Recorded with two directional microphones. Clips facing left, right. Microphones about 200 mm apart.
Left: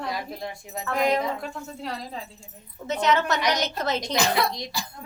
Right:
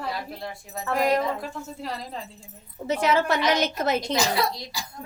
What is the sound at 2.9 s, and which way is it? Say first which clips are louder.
Speech: right 1 dB; 30° right (ahead or behind).